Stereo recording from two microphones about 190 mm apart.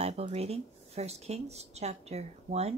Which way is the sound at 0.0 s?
35° right (ahead or behind).